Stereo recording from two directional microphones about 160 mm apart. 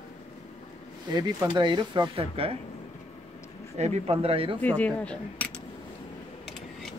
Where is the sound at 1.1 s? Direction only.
25° right (ahead or behind).